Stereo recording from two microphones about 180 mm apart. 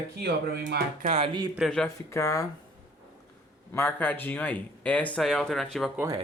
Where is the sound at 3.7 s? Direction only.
10° left (ahead or behind).